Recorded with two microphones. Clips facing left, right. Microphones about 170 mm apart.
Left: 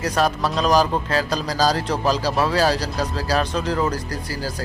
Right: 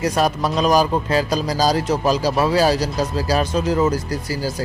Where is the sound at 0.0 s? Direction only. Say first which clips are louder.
Right 2 dB; 10° right (ahead or behind).